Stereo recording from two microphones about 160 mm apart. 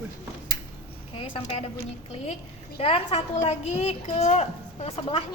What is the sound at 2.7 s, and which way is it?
A woman's voice, 35° left (ahead or behind).